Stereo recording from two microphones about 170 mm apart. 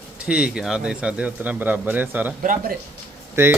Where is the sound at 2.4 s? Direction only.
55° right (ahead or behind).